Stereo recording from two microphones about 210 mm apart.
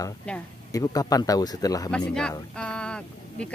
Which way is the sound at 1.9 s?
5° left (ahead or behind).